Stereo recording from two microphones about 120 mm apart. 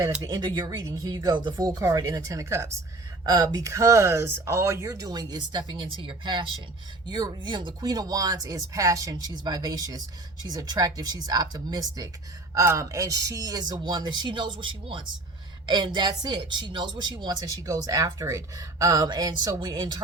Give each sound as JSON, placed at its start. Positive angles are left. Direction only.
{"t": 0.2, "sound": "speech", "side_deg": -35}
{"t": 1.8, "sound": "speech", "side_deg": -25}